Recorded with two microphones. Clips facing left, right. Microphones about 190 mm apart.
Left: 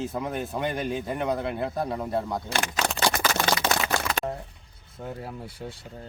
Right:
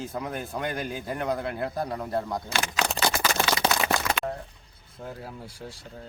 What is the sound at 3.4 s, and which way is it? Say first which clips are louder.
Single-lens reflex camera: left 2 dB; 60° left (ahead or behind).